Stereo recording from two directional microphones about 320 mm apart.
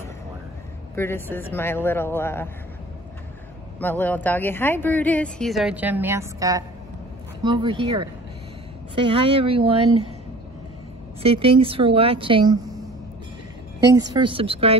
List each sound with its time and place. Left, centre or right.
0.9 s a man's voice: centre
3.8 s a woman's voice: centre
11.2 s a woman's voice: centre
13.9 s a woman's voice: centre